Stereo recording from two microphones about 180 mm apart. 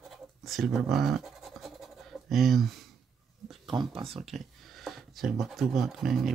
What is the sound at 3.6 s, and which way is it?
Speech, 25° right (ahead or behind).